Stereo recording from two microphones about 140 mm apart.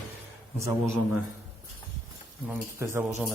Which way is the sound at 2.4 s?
15° right (ahead or behind).